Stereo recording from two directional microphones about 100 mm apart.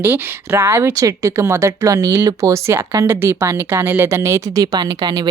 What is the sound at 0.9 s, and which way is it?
Speech, 35° right (ahead or behind).